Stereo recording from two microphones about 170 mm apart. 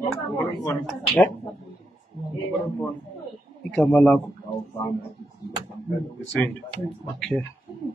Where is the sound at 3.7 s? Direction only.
5° left (ahead or behind).